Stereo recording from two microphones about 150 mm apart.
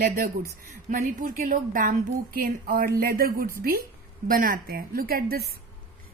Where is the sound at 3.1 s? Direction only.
85° right.